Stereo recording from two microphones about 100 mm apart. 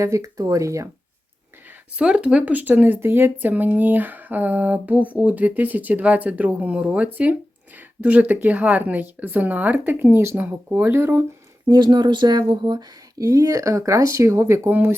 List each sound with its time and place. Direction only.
0.0 s speech: 30° right (ahead or behind)
2.0 s speech: 10° right (ahead or behind)
11.7 s speech: 45° right (ahead or behind)
13.1 s speech: 35° right (ahead or behind)